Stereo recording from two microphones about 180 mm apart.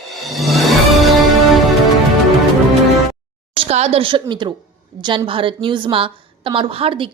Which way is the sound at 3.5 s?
35° right (ahead or behind).